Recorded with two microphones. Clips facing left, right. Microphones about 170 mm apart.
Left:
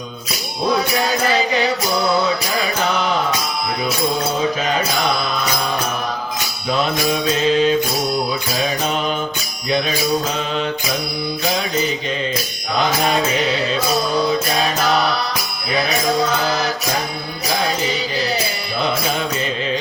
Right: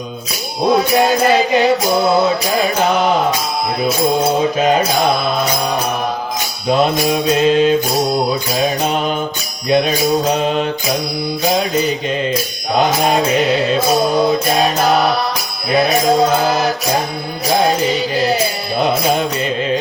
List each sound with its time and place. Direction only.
0.7 s music: 50° right (ahead or behind)
4.4 s mantra: 50° right (ahead or behind)
6.7 s mantra: 45° right (ahead or behind)
12.8 s mantra: 50° right (ahead or behind)
16.4 s music: 50° right (ahead or behind)
18.8 s music: 45° right (ahead or behind)